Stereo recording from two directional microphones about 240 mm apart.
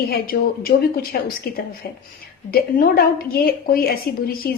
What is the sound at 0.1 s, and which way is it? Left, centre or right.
A woman's voice, left.